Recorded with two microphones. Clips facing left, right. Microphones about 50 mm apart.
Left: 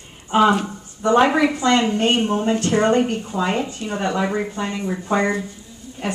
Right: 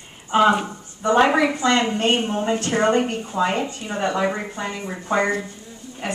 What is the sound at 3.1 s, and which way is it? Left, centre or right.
Speech, right.